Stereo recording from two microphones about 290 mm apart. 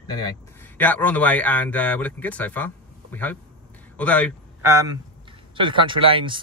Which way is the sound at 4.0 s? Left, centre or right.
Centre.